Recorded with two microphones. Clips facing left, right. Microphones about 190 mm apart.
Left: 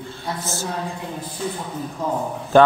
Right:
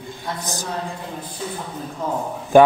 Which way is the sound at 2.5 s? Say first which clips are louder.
Right 2 dB; 15° right (ahead or behind).